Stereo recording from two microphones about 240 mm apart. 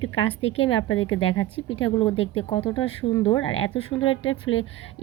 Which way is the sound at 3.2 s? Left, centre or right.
Left.